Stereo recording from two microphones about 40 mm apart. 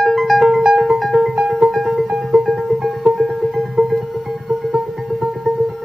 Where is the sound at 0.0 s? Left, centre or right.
Centre.